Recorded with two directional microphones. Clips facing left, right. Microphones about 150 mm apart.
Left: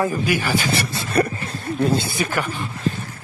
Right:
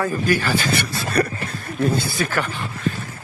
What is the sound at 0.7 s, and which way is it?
Speech, 25° left (ahead or behind).